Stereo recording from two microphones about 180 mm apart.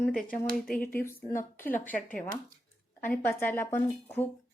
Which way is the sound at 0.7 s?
55° left (ahead or behind).